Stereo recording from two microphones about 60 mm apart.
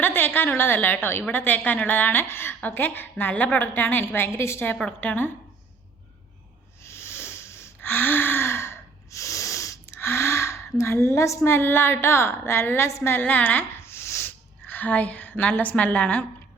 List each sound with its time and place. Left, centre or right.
0.0 s a woman's voice: left
2.6 s a woman's voice: left
4.9 s a woman's voice: left
6.8 s wheeze: left
10.9 s a woman's voice: left
13.1 s a sound: left
14.3 s a woman's voice: left